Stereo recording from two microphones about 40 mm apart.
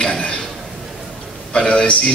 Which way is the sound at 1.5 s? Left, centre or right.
Left.